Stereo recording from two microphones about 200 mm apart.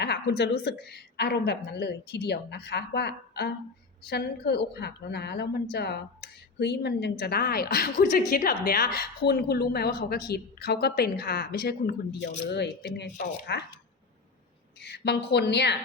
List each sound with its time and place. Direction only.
0.0 s a woman's voice: 55° left (ahead or behind)
14.8 s a woman's voice: 60° left (ahead or behind)